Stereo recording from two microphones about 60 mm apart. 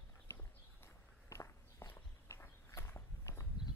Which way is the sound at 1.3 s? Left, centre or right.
Left.